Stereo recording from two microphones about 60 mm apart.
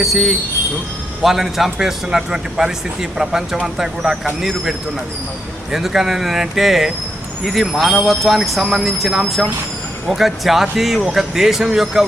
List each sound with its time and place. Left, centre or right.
0.0 s a man's voice: centre
5.7 s speech: centre